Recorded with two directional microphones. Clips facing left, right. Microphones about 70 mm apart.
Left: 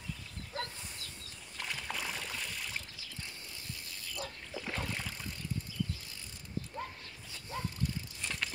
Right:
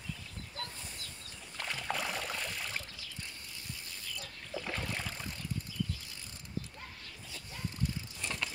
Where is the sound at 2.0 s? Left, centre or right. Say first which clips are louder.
Right 3 dB; centre.